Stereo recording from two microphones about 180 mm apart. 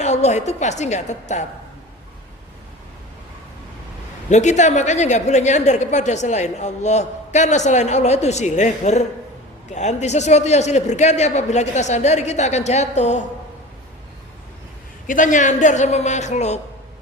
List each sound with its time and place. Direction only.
0.0 s a woman's voice: 40° left (ahead or behind)
4.3 s a woman's voice: 40° left (ahead or behind)
15.0 s a woman's voice: 45° left (ahead or behind)